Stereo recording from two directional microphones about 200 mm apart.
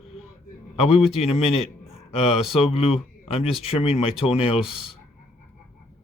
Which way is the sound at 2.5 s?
30° left (ahead or behind).